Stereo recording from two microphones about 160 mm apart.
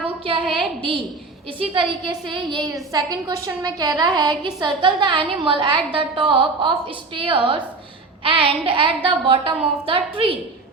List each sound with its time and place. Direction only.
0.4 s a woman's voice: centre (ahead or behind)
0.8 s a woman's voice: 35° right (ahead or behind)